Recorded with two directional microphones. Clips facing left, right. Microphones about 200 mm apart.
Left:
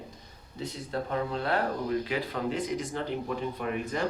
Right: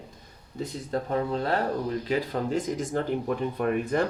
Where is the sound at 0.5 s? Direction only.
40° right (ahead or behind).